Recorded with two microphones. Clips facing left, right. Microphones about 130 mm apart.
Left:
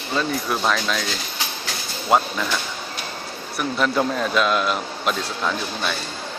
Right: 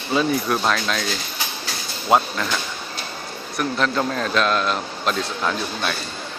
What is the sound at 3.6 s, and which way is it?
Speech, 5° left (ahead or behind).